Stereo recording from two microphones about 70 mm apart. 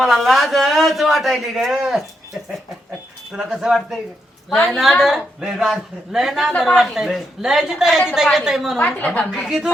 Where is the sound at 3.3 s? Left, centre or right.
Centre.